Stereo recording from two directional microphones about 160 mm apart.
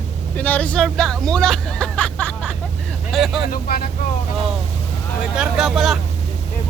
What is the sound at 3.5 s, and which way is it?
Speech, 65° left (ahead or behind).